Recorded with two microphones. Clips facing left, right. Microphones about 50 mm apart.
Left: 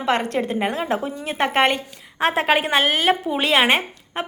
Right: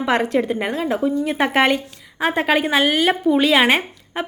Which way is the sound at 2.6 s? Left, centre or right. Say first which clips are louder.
Right 1 dB; left.